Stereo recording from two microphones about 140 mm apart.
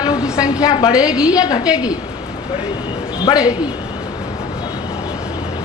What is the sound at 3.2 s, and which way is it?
Speech, 25° left (ahead or behind).